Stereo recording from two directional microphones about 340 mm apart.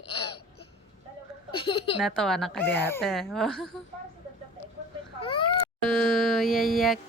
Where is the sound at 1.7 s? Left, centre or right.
Centre.